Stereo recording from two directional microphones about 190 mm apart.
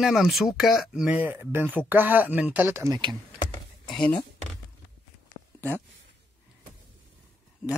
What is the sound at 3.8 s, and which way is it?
Speech, 5° left (ahead or behind).